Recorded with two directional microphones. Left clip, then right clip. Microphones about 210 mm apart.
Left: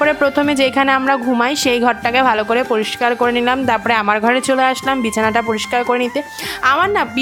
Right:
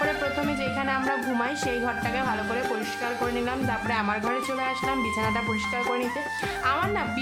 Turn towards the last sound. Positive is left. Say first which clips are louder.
# left 12 dB
turn(degrees=40)  # may be behind; listen again after turning